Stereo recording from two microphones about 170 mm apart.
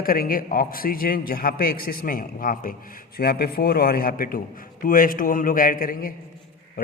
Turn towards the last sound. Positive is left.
turn(degrees=55)  # may be behind; listen again after turning